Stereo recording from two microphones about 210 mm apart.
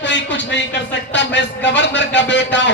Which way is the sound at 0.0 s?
55° left (ahead or behind).